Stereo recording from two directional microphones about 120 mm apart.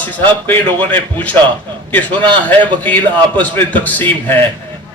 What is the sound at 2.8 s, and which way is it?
A man's voice, 15° left (ahead or behind).